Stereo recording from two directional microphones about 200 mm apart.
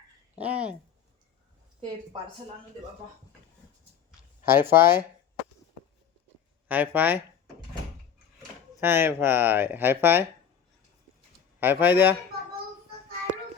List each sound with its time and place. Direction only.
0.3 s speech: 5° right (ahead or behind)
2.1 s speech: 25° right (ahead or behind)
4.4 s speech: 10° right (ahead or behind)
6.7 s speech: 10° right (ahead or behind)
8.8 s speech: 10° right (ahead or behind)
11.6 s speech: 10° right (ahead or behind)